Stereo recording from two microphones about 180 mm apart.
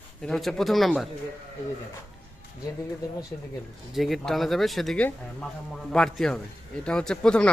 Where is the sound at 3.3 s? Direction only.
15° left (ahead or behind).